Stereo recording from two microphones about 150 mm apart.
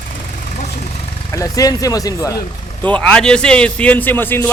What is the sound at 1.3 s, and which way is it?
Speech, 25° left (ahead or behind).